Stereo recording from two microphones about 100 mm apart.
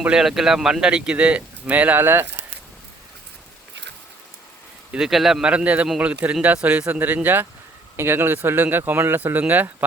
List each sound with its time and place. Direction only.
0.0 s speech: 5° right (ahead or behind)
4.9 s speech: 5° right (ahead or behind)